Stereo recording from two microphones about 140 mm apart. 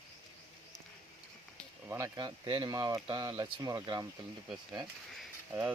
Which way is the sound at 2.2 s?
30° right (ahead or behind).